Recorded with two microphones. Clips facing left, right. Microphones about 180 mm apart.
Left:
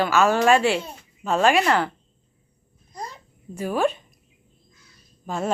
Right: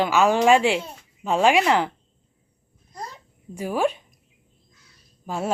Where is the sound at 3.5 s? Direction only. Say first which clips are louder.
Left 1 dB; 10° right (ahead or behind).